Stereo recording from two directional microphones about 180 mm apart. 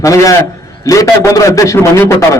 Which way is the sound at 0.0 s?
20° left (ahead or behind).